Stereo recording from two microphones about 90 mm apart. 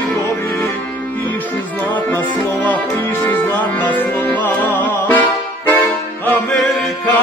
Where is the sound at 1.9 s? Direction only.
20° left (ahead or behind).